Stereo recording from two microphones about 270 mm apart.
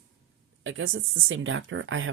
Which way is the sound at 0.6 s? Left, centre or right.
Right.